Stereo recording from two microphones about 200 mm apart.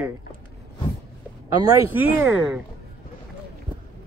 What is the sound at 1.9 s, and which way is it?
Speech, 10° right (ahead or behind).